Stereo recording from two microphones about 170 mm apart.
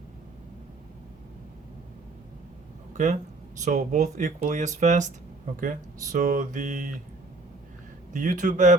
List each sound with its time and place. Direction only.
3.6 s speech: 45° right (ahead or behind)
8.1 s speech: 50° right (ahead or behind)